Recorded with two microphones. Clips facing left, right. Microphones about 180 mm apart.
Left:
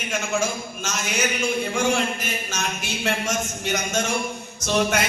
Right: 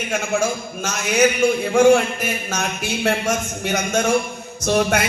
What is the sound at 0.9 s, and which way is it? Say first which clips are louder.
A man's voice: right 9 dB; 60° right (ahead or behind).